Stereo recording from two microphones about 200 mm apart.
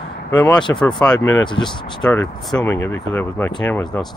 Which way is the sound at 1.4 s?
20° left (ahead or behind).